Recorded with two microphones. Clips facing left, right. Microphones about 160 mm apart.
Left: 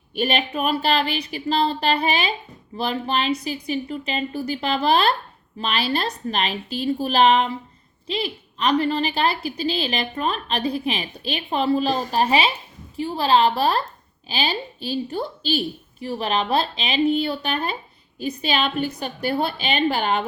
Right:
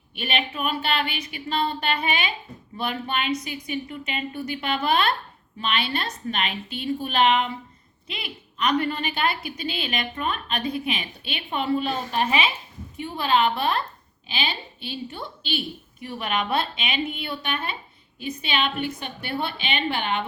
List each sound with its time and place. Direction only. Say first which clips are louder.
0.1 s a woman's voice: left 6 dB; 35° left (ahead or behind)